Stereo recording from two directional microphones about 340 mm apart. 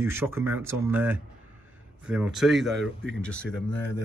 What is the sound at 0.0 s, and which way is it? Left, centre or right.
Speech, centre.